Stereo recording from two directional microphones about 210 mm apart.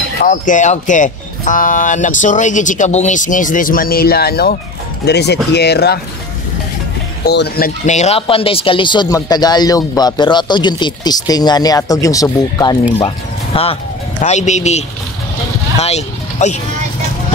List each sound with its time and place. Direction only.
0.2 s speech: 40° left (ahead or behind)
7.2 s speech: 50° left (ahead or behind); by 16.5 s 30° left (ahead or behind)